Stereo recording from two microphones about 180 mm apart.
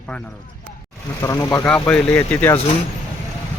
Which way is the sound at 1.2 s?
20° left (ahead or behind).